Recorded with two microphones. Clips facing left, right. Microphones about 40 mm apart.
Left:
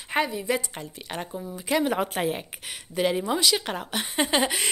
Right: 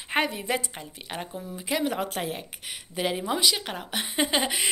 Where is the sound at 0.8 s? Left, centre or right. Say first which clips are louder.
Left 2 dB; centre.